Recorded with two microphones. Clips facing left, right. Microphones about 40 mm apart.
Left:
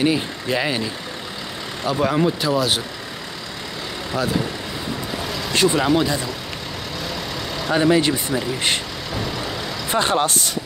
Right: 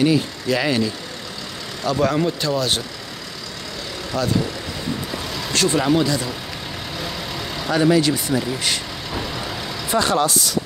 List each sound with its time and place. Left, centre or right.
0.0 s speech: centre
4.1 s speech: centre
5.5 s speech: left
7.7 s speech: left
9.8 s speech: left